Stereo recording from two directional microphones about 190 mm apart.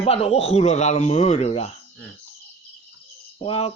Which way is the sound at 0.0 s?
30° left (ahead or behind).